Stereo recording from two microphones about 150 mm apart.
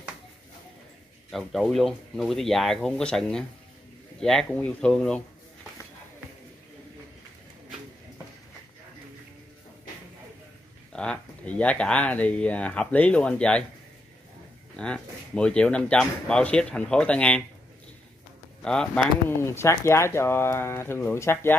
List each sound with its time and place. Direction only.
1.3 s speech: centre (ahead or behind)
10.9 s speech: 5° left (ahead or behind)
14.8 s speech: 5° left (ahead or behind)
18.6 s speech: 5° left (ahead or behind)
19.4 s speech: 15° left (ahead or behind)